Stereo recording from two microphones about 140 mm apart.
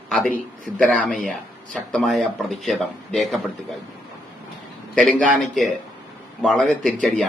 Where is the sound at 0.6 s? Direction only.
5° left (ahead or behind).